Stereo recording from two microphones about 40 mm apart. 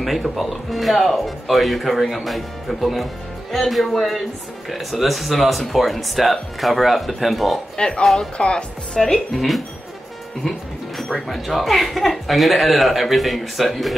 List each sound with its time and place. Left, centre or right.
0.4 s speech: centre
7.7 s speech: centre
9.0 s speech: centre
11.0 s speech: centre